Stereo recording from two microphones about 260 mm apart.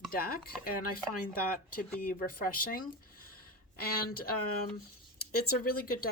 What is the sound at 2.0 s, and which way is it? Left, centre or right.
Speech, left.